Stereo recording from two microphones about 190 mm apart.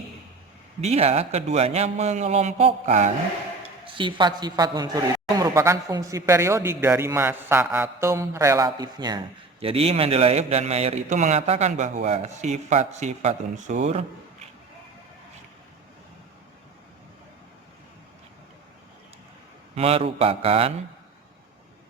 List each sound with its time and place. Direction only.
0.8 s a man's voice: 35° right (ahead or behind)
3.8 s a woman's voice: 25° right (ahead or behind)
19.7 s a man's voice: 30° right (ahead or behind)